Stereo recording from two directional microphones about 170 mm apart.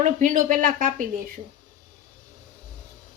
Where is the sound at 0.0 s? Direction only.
50° right (ahead or behind).